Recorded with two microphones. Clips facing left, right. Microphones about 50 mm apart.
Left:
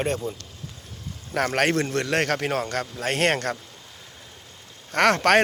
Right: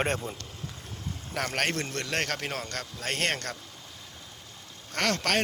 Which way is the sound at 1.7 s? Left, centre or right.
Left.